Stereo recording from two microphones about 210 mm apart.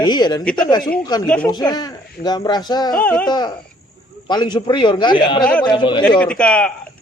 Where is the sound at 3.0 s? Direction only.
5° left (ahead or behind).